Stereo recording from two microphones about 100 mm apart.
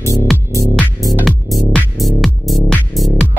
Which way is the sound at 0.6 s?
35° left (ahead or behind).